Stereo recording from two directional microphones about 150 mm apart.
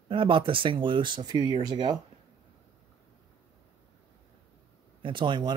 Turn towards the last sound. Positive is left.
turn(degrees=-30)  # may be behind; listen again after turning